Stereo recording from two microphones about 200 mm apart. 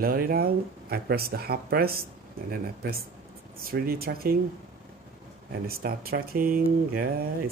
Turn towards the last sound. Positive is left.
turn(degrees=-45)  # may be behind; listen again after turning